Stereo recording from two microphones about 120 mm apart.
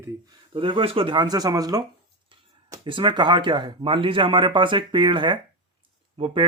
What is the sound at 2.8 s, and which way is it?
Speech, 40° right (ahead or behind).